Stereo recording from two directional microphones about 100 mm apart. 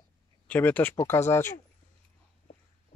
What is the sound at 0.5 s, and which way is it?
Speech, 15° left (ahead or behind).